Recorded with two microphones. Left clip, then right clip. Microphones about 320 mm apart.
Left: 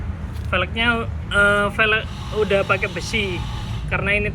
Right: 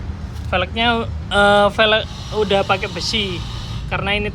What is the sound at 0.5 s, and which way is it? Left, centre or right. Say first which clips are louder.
Speech: right 2 dB; centre.